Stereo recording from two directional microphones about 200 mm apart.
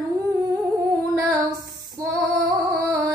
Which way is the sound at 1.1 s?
20° right (ahead or behind).